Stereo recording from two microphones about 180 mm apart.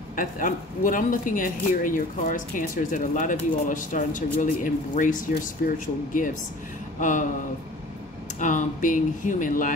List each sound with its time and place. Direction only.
0.1 s speech: 50° left (ahead or behind)
7.0 s speech: 45° left (ahead or behind)
8.4 s speech: 45° left (ahead or behind)